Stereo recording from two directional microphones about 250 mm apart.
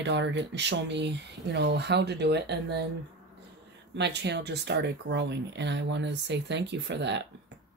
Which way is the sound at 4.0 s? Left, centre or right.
Right.